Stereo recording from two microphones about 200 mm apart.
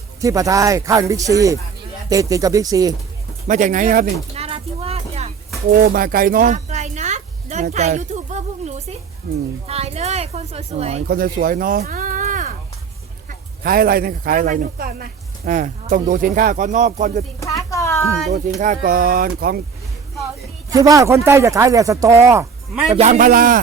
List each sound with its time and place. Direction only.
0.2 s speech: 15° right (ahead or behind)
3.4 s speech: 40° right (ahead or behind)
4.4 s a sound: 30° right (ahead or behind)
5.7 s a sound: 45° right (ahead or behind)
9.2 s speech: 50° right (ahead or behind)
9.6 s speech: 30° right (ahead or behind)
11.1 s speech: 45° right (ahead or behind)
17.7 s a sound: 15° left (ahead or behind)
18.6 s speech: 45° right (ahead or behind)
20.7 s speech: 15° right (ahead or behind)
23.0 s speech: 35° right (ahead or behind)